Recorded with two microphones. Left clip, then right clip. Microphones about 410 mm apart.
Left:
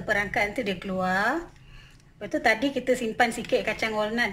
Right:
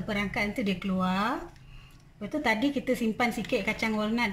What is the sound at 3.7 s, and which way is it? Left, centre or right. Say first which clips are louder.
Music: left 3 dB; centre.